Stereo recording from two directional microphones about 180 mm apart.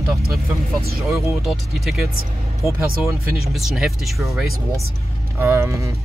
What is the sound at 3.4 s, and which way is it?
Speech, centre (ahead or behind).